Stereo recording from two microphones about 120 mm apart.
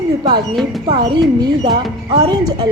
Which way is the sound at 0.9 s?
40° right (ahead or behind).